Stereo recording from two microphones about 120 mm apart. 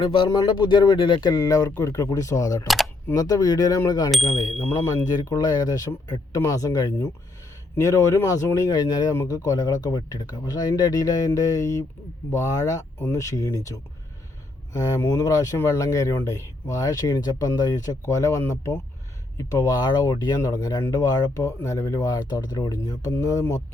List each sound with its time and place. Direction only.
0.0 s speech: 45° left (ahead or behind); by 2.6 s 30° left (ahead or behind)
2.6 s speech: centre (ahead or behind)
3.2 s speech: 30° left (ahead or behind)
4.1 s speech: centre (ahead or behind)
5.0 s speech: 30° left (ahead or behind)